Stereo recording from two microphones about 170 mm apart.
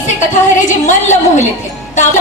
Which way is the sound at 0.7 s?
45° left (ahead or behind).